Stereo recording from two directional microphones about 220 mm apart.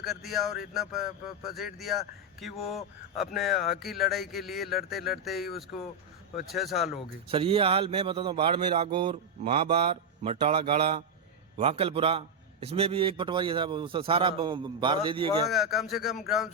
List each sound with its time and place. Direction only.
0.0 s a man's voice: centre (ahead or behind)
7.3 s a man's voice: 25° right (ahead or behind)
15.4 s a man's voice: centre (ahead or behind)